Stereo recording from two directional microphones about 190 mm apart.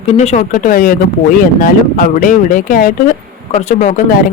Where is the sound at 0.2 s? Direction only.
35° left (ahead or behind).